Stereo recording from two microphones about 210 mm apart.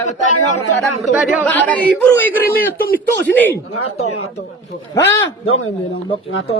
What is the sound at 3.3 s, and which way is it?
Speech, 10° left (ahead or behind).